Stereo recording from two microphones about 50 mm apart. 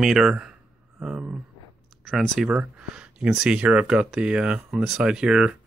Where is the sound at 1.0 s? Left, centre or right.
Right.